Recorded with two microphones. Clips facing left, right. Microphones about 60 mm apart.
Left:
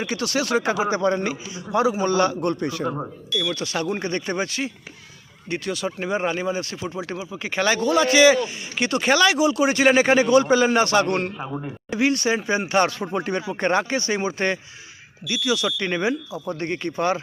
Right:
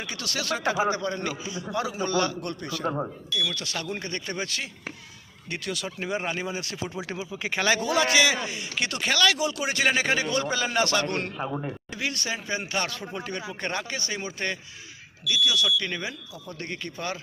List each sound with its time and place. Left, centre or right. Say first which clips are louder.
0.2 s a man's voice: left 6 dB; left
1.0 s speech: left 8 dB; left
1.7 s speech: left 7 dB; left
3.5 s a man's voice: left 7 dB; centre
4.4 s a man's voice: left 5 dB; centre
9.0 s a man's voice: left 6 dB; centre
11.9 s speech: left 13 dB; left